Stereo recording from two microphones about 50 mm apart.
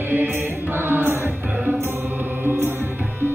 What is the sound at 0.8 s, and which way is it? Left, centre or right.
Music, right.